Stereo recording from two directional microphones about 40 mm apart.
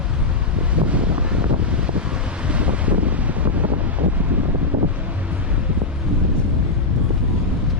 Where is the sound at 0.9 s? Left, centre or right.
Right.